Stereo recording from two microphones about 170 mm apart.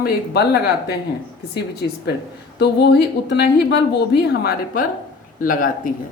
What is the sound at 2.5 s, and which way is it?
Speech, 80° left.